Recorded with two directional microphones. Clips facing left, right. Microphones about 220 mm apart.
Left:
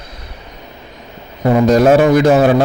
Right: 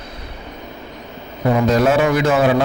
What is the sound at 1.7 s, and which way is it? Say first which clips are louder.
Speech: left 8 dB; 40° left (ahead or behind).